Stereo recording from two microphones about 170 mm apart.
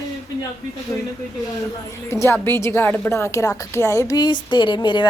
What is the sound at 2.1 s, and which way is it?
A woman's voice, 15° left (ahead or behind).